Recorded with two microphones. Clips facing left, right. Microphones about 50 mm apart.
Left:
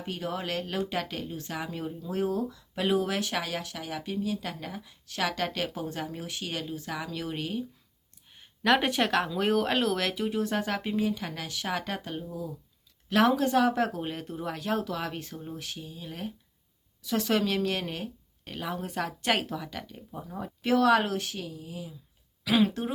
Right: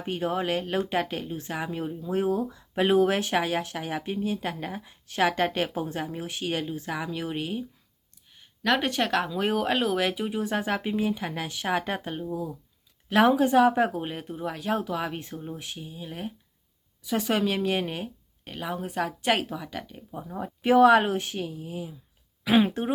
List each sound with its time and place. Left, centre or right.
0.0 s speech: right
8.6 s speech: centre; by 22.9 s right